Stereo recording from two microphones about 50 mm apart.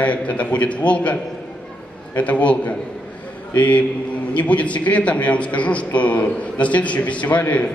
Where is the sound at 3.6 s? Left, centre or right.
Left.